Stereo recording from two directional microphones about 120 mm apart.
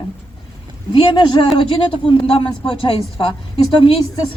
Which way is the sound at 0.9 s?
40° left (ahead or behind).